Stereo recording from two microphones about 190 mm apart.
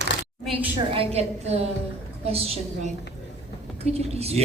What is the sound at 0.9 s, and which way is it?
A man's voice, 35° right (ahead or behind).